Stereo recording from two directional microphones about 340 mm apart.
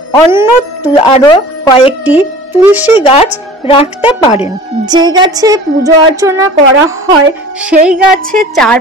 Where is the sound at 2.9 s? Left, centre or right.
Centre.